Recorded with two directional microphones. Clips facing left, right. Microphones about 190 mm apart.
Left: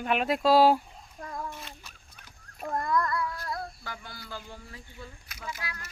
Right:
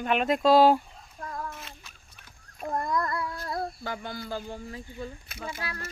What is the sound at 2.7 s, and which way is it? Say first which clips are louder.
Child singing: even; 20° right (ahead or behind).